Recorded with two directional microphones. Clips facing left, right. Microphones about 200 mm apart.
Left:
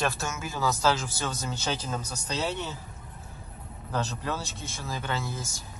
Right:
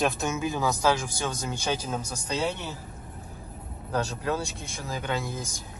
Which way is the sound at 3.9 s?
10° right (ahead or behind).